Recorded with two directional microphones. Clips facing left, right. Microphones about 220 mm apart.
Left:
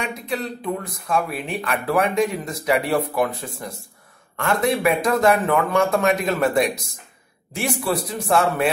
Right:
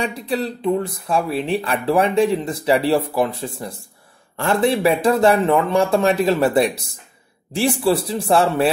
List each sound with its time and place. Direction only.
0.0 s a man's voice: 30° right (ahead or behind)